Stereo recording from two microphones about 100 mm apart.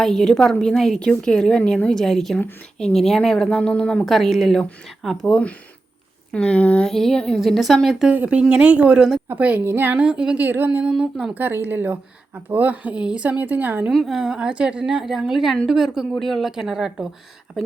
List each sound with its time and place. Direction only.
0.0 s a woman's voice: 5° left (ahead or behind)
8.1 s speech: 15° right (ahead or behind)
13.9 s a woman's voice: 5° right (ahead or behind)